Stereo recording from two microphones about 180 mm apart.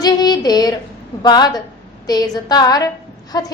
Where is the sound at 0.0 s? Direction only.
20° left (ahead or behind).